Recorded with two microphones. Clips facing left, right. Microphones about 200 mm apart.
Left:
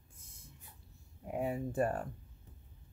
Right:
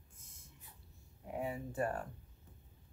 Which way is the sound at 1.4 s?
40° left (ahead or behind).